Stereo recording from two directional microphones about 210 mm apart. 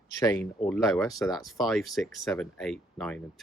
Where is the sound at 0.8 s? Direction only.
Centre (ahead or behind).